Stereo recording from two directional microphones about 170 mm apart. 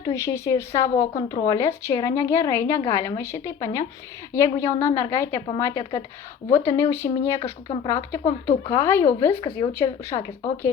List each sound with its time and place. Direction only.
0.0 s a woman's voice: 15° left (ahead or behind)
9.4 s speech: 30° left (ahead or behind)
9.7 s a woman's voice: 15° left (ahead or behind)